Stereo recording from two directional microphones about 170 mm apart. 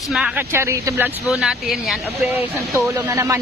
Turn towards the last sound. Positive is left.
turn(degrees=-15)  # may be behind; listen again after turning